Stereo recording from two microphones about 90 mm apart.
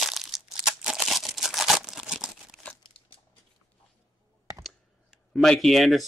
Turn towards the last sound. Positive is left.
turn(degrees=0)  # may be behind; listen again after turning